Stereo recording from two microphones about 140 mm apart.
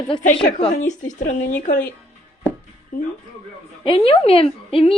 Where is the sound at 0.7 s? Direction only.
65° left (ahead or behind).